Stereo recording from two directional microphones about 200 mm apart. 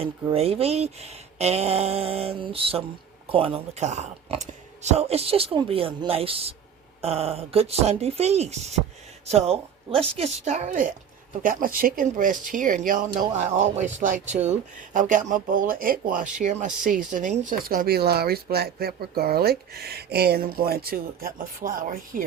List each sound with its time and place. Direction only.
0.0 s speech: 30° right (ahead or behind)